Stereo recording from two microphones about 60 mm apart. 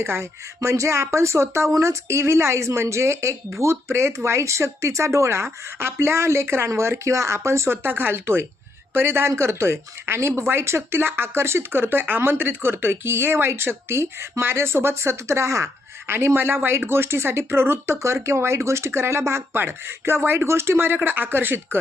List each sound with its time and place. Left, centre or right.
0.0 s speech: right